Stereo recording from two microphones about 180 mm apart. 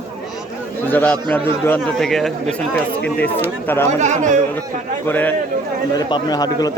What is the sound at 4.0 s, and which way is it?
Speech, 40° right (ahead or behind).